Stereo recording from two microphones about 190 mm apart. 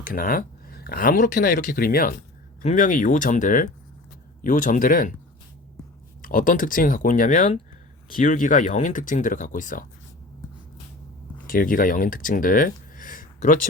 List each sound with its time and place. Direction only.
0.0 s speech: 45° left (ahead or behind)
6.2 s speech: 45° left (ahead or behind)
11.4 s speech: 45° left (ahead or behind)